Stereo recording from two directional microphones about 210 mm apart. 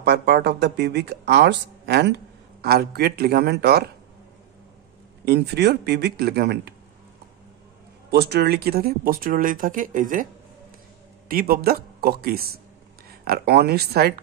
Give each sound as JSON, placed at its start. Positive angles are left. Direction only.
{"t": 0.0, "sound": "speech", "side_deg": -50}
{"t": 5.2, "sound": "speech", "side_deg": -50}
{"t": 8.1, "sound": "speech", "side_deg": -50}
{"t": 11.2, "sound": "speech", "side_deg": -45}